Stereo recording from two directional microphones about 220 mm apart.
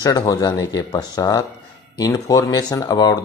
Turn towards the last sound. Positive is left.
turn(degrees=15)  # may be behind; listen again after turning